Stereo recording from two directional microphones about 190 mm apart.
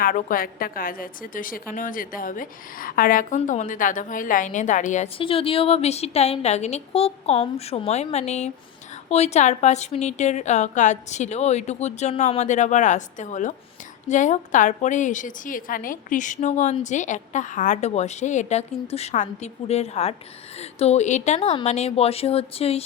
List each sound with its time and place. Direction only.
0.0 s a woman's voice: 45° left (ahead or behind); by 22.8 s 30° left (ahead or behind)